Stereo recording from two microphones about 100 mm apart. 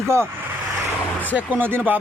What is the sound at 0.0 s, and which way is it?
Vehicle, 25° right (ahead or behind).